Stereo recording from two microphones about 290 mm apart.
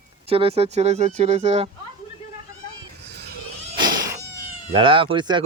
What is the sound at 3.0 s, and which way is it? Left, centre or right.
Children playing, right.